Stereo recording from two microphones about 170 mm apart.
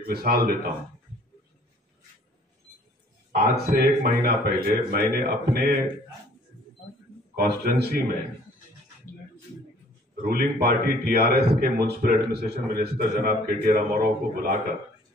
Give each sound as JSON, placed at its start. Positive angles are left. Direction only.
{"t": 0.0, "sound": "a man's voice", "side_deg": -65}
{"t": 3.3, "sound": "a man's voice", "side_deg": -60}
{"t": 7.3, "sound": "a man's voice", "side_deg": -65}
{"t": 10.2, "sound": "a man's voice", "side_deg": -65}